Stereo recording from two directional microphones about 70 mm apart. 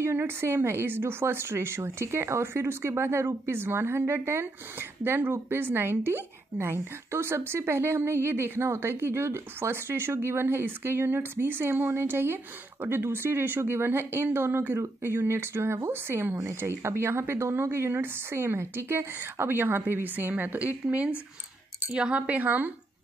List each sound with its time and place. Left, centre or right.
0.0 s speech: right
21.8 s speech: centre